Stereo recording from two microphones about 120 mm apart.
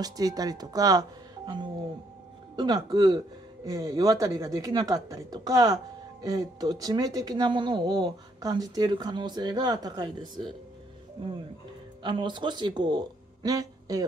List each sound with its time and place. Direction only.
0.0 s a woman's voice: 30° right (ahead or behind)
12.0 s speech: 40° right (ahead or behind)